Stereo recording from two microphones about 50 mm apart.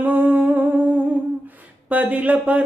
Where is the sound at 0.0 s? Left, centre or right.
Right.